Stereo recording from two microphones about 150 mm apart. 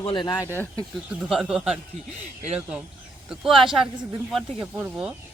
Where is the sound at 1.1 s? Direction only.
5° right (ahead or behind).